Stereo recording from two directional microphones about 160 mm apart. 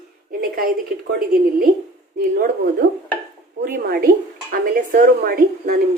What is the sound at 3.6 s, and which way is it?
A woman's voice, 65° right (ahead or behind).